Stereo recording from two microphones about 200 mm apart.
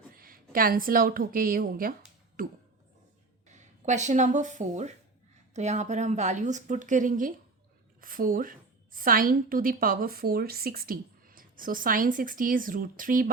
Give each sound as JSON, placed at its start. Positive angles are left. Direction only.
{"t": 0.1, "sound": "a woman's voice", "side_deg": -45}